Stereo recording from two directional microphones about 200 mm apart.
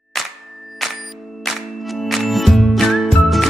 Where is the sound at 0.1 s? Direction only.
Centre (ahead or behind).